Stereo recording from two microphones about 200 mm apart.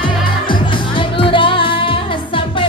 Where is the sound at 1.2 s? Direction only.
25° left (ahead or behind).